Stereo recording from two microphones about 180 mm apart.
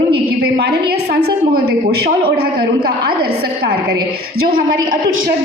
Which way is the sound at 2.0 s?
60° right (ahead or behind).